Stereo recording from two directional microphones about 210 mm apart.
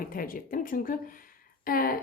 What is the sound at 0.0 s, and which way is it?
Speech, 40° left (ahead or behind).